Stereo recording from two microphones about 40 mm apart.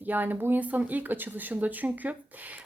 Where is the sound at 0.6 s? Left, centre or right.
Right.